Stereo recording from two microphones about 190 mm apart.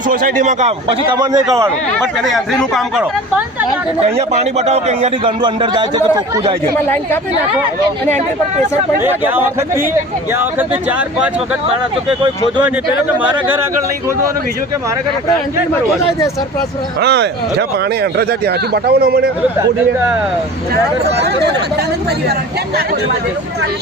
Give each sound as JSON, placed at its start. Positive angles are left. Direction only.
{"t": 0.1, "sound": "a man's voice", "side_deg": -45}
{"t": 1.1, "sound": "speech", "side_deg": -20}
{"t": 2.2, "sound": "speech", "side_deg": 0}
{"t": 4.0, "sound": "a man's voice", "side_deg": -35}
{"t": 6.8, "sound": "speech", "side_deg": 10}
{"t": 9.0, "sound": "speech", "side_deg": -10}
{"t": 17.0, "sound": "speech", "side_deg": -60}
{"t": 21.2, "sound": "speech", "side_deg": -65}